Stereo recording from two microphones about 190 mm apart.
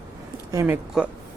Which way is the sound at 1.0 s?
5° right (ahead or behind).